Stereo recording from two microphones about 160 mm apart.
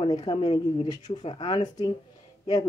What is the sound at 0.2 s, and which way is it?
Speech, 35° left (ahead or behind).